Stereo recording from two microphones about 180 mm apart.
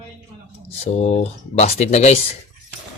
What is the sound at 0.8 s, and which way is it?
Speech, 35° left (ahead or behind).